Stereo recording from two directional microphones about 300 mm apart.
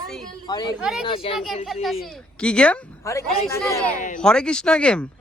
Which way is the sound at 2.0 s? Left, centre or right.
Centre.